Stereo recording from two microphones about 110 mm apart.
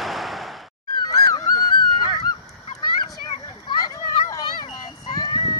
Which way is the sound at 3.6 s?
35° left (ahead or behind).